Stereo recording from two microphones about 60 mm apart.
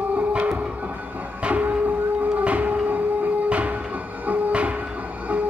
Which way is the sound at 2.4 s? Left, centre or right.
Right.